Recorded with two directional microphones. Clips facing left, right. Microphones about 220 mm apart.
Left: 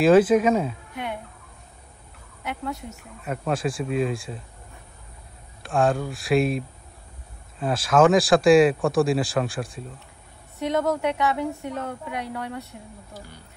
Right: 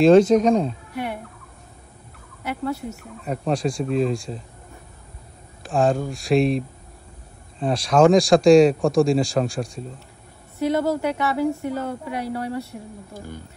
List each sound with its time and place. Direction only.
0.0 s speech: 5° left (ahead or behind)
2.7 s speech: centre (ahead or behind)
5.6 s speech: centre (ahead or behind)
13.1 s speech: 50° right (ahead or behind)